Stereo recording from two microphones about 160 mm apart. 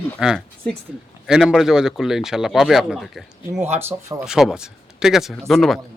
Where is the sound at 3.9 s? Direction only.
15° right (ahead or behind).